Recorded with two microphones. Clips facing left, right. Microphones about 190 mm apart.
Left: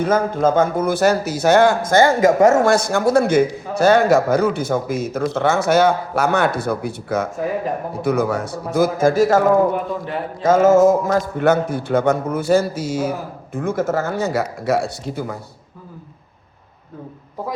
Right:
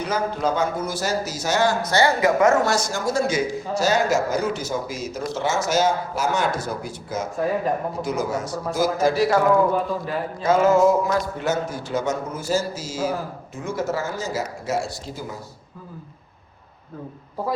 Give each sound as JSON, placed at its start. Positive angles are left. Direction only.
{"t": 0.0, "sound": "a man's voice", "side_deg": 50}
{"t": 2.7, "sound": "a man's voice", "side_deg": 60}
{"t": 10.4, "sound": "a man's voice", "side_deg": 45}